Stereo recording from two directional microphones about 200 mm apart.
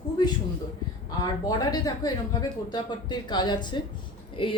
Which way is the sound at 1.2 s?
20° left (ahead or behind).